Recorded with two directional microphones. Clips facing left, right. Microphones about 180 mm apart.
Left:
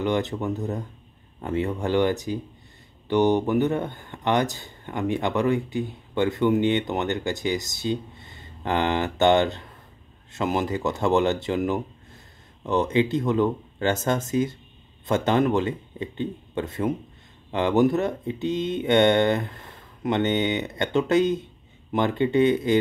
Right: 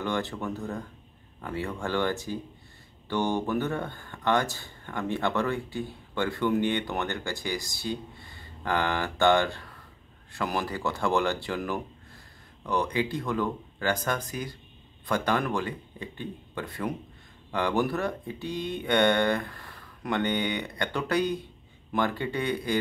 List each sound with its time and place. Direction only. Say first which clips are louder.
0.0 s speech: left 6 dB; 20° left (ahead or behind)